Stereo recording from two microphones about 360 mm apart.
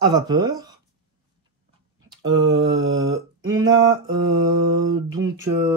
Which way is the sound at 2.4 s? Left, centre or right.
Right.